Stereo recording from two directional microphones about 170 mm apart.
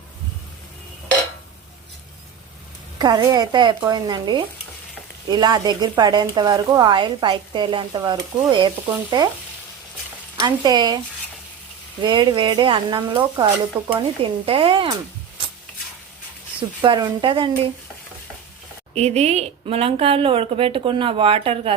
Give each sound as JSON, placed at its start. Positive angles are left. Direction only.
{"t": 3.0, "sound": "speech", "side_deg": -25}
{"t": 10.3, "sound": "speech", "side_deg": -25}
{"t": 12.0, "sound": "a woman's voice", "side_deg": -25}
{"t": 16.8, "sound": "speech", "side_deg": -25}
{"t": 18.9, "sound": "a woman's voice", "side_deg": -40}